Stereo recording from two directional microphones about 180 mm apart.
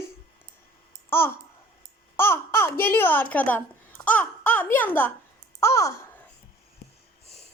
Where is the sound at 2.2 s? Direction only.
10° left (ahead or behind).